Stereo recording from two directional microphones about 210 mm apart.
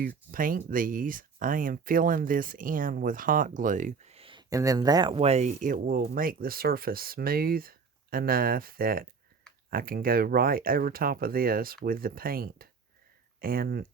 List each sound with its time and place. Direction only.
0.3 s speech: 40° right (ahead or behind)